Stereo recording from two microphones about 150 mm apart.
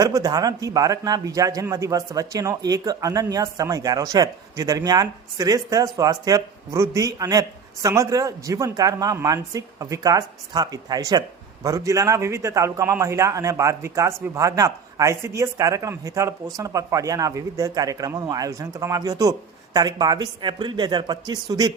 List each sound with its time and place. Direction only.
0.0 s speech: 25° right (ahead or behind)